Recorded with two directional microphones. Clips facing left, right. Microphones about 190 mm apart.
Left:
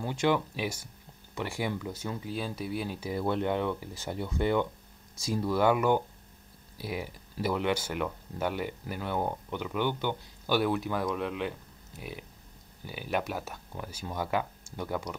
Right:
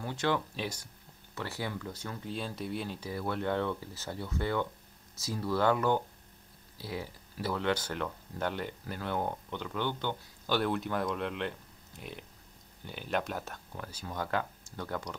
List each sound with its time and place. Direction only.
0.1 s speech: 10° left (ahead or behind)
3.2 s speech: 20° left (ahead or behind)